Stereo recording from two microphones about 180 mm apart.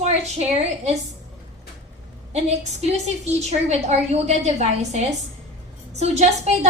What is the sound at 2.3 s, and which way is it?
A woman's voice, 40° right (ahead or behind).